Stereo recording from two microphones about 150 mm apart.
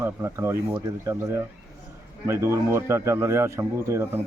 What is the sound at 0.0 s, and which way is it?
Speech, 15° right (ahead or behind).